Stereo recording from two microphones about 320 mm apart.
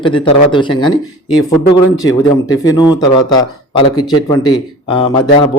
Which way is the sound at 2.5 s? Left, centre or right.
Centre.